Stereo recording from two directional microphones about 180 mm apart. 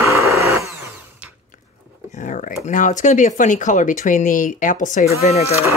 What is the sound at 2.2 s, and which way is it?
Speech, 45° left (ahead or behind).